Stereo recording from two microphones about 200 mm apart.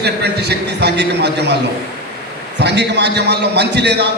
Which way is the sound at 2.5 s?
60° right (ahead or behind).